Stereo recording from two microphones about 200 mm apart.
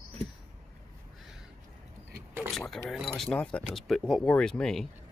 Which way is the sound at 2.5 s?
Centre (ahead or behind).